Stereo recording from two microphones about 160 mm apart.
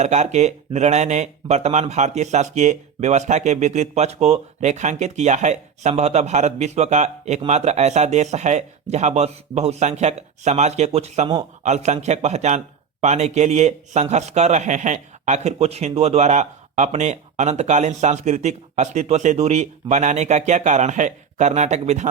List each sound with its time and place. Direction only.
0.0 s speech: 45° right (ahead or behind)